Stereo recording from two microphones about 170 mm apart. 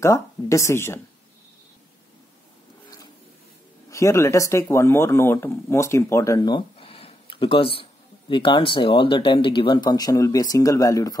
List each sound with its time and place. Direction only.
0.0 s speech: 15° left (ahead or behind)
3.9 s speech: 15° left (ahead or behind)